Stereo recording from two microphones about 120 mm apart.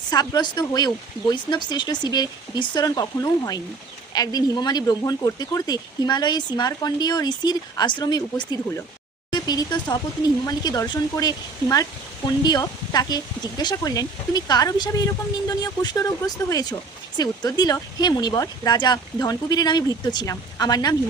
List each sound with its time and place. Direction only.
0.1 s speech: 35° left (ahead or behind)